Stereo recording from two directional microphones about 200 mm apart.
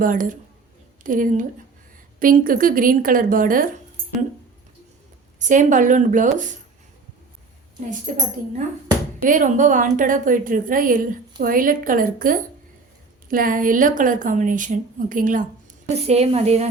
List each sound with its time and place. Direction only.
0.0 s a woman's voice: 40° right (ahead or behind)
5.4 s a woman's voice: 40° right (ahead or behind)
7.9 s a woman's voice: 40° right (ahead or behind)